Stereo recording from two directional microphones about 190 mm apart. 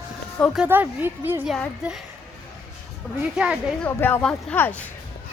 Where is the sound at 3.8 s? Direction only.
10° left (ahead or behind).